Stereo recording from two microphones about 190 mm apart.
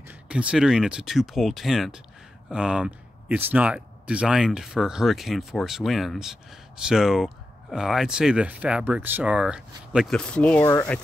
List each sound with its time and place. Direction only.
0.3 s speech: 5° right (ahead or behind); by 11.0 s 15° left (ahead or behind)